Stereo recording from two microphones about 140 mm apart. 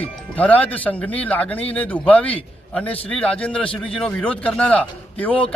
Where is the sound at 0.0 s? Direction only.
10° left (ahead or behind).